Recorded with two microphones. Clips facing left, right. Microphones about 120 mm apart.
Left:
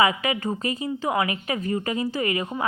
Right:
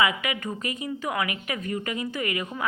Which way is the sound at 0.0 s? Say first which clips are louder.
Left 4 dB; 30° left (ahead or behind).